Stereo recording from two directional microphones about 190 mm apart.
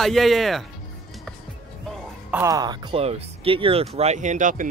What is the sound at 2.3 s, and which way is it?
Speech, 15° right (ahead or behind).